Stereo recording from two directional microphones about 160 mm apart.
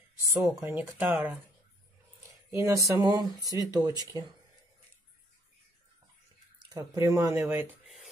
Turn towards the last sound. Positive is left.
turn(degrees=-15)  # may be behind; listen again after turning